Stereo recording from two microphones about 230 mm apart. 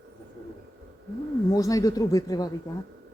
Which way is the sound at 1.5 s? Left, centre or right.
Centre.